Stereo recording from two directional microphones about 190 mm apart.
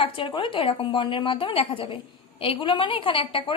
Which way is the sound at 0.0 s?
25° left (ahead or behind).